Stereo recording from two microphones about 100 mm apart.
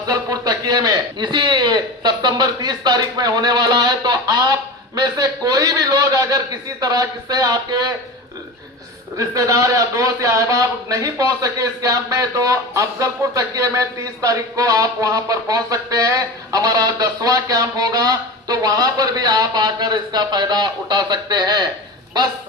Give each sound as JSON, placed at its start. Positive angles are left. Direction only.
{"t": 0.0, "sound": "a man's voice", "side_deg": -40}
{"t": 9.1, "sound": "a man's voice", "side_deg": -35}